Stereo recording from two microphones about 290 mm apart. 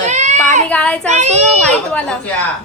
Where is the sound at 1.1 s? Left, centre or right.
Right.